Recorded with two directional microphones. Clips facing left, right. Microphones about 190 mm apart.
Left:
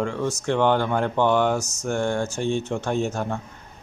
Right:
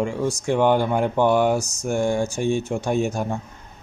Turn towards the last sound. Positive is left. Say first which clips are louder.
# right 2 dB
turn(degrees=-10)  # may be behind; listen again after turning